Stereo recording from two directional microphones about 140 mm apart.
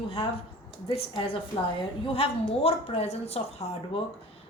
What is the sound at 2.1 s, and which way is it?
A woman's voice, 45° left (ahead or behind).